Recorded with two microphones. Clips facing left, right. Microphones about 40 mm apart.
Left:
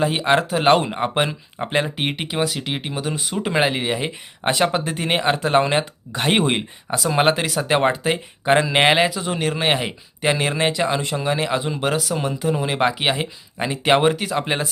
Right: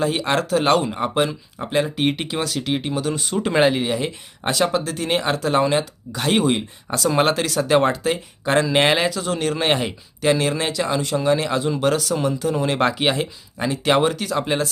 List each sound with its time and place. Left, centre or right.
0.0 s speech: centre
6.9 s a man's voice: centre